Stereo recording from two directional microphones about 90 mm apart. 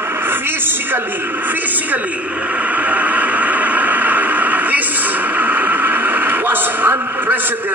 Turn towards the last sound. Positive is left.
turn(degrees=-25)  # may be behind; listen again after turning